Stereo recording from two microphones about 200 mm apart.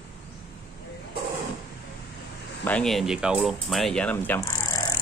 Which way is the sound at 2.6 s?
5° left (ahead or behind).